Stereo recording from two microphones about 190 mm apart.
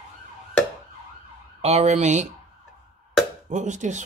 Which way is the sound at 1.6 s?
35° right (ahead or behind).